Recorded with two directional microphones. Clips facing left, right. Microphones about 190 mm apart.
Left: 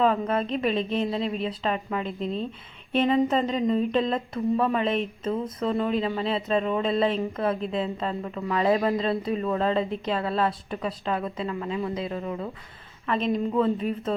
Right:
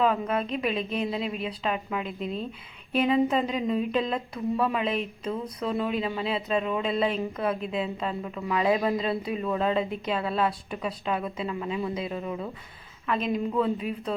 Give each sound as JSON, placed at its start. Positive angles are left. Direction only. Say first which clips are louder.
{"t": 0.0, "sound": "speech", "louder": "left 2 dB", "side_deg": 0}
{"t": 13.1, "sound": "speech", "louder": "left 2 dB", "side_deg": 0}